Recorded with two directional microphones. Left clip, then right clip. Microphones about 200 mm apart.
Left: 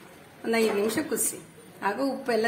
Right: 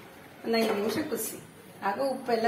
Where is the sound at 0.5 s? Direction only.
45° left (ahead or behind).